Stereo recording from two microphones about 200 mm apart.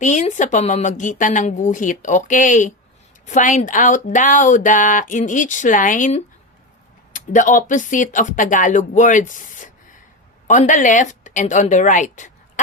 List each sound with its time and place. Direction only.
0.0 s speech: 35° left (ahead or behind)